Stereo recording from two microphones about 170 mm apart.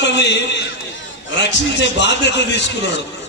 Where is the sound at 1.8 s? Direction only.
90° left.